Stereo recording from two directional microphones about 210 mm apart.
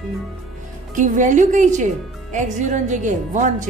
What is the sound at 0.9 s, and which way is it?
Speech, 35° right (ahead or behind).